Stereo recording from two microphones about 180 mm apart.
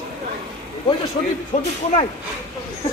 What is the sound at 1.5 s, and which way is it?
Speech, 40° left (ahead or behind).